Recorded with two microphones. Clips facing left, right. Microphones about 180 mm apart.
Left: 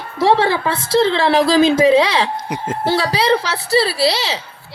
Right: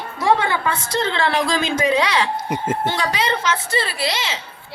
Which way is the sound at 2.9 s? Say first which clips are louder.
Left 10 dB; 35° left (ahead or behind).